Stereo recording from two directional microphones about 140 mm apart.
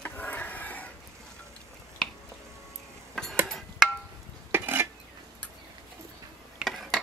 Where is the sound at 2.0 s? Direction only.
5° left (ahead or behind).